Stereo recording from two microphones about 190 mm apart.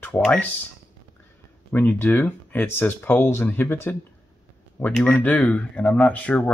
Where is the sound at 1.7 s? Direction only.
10° left (ahead or behind).